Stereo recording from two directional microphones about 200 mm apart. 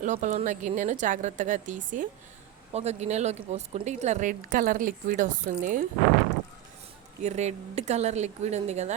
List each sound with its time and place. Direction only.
0.0 s a woman's voice: 40° right (ahead or behind)
7.2 s a woman's voice: 35° right (ahead or behind)